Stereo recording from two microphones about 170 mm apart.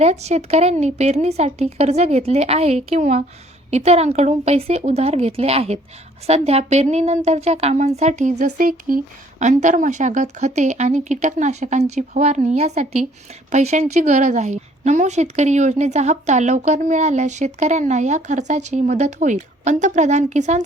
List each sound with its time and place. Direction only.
0.0 s a woman's voice: 40° right (ahead or behind); by 9.0 s 55° right (ahead or behind)
9.4 s a woman's voice: 45° right (ahead or behind)